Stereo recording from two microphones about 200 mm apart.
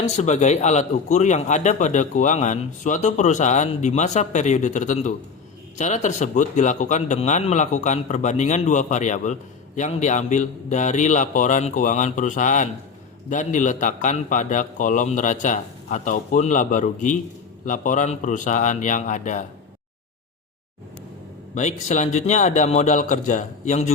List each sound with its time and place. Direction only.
0.0 s a man's voice: 35° left (ahead or behind)
21.5 s a man's voice: 35° left (ahead or behind)